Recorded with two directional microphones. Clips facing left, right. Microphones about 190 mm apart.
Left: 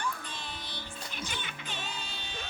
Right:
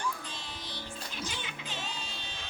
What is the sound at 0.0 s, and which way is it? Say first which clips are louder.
Music: even; 55° left (ahead or behind).